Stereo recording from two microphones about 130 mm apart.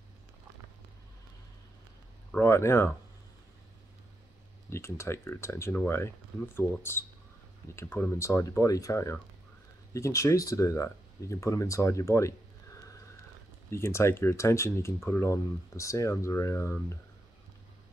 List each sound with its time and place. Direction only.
2.3 s speech: 20° left (ahead or behind)
4.6 s speech: 20° left (ahead or behind)
13.7 s speech: 20° left (ahead or behind)